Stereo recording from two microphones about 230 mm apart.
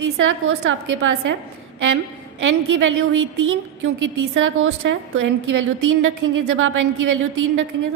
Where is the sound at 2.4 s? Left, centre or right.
Right.